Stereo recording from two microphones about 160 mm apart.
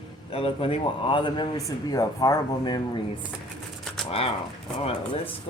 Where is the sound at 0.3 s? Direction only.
35° left (ahead or behind).